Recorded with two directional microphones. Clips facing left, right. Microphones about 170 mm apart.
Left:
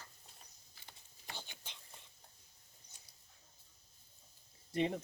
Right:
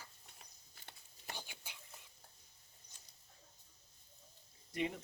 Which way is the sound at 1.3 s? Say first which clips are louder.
Even; 10° right (ahead or behind).